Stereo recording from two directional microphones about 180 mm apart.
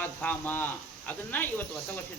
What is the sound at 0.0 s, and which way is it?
Speech, 10° left (ahead or behind).